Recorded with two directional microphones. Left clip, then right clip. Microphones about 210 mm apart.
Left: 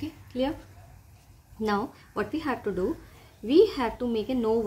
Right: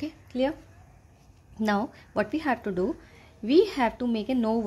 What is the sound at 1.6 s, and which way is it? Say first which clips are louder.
A woman's voice: right 1 dB; 30° right (ahead or behind).